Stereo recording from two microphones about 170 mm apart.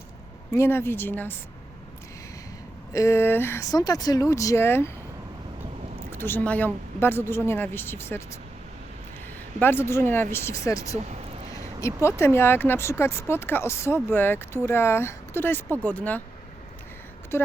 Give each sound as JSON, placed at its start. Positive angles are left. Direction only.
{"t": 0.5, "sound": "speech", "side_deg": 15}
{"t": 2.9, "sound": "speech", "side_deg": 15}
{"t": 6.1, "sound": "speech", "side_deg": 15}
{"t": 9.6, "sound": "speech", "side_deg": 15}
{"t": 11.5, "sound": "a sound", "side_deg": 20}
{"t": 12.0, "sound": "speech", "side_deg": 15}
{"t": 17.3, "sound": "speech", "side_deg": 15}